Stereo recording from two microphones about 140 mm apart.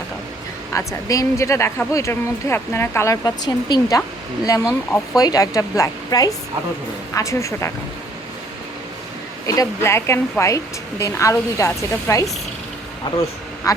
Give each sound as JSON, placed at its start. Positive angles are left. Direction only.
{"t": 0.7, "sound": "speech", "side_deg": 25}
{"t": 9.5, "sound": "speech", "side_deg": 20}
{"t": 13.1, "sound": "a man's voice", "side_deg": 35}